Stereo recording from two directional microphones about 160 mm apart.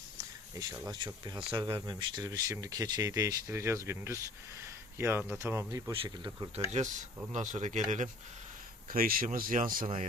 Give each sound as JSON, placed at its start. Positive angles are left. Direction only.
{"t": 0.2, "sound": "speech", "side_deg": -20}
{"t": 5.9, "sound": "speech", "side_deg": -35}
{"t": 6.7, "sound": "speech", "side_deg": -45}
{"t": 8.9, "sound": "speech", "side_deg": -65}
{"t": 9.8, "sound": "speech", "side_deg": -40}